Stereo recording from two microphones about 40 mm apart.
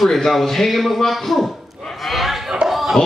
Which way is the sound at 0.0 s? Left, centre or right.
Centre.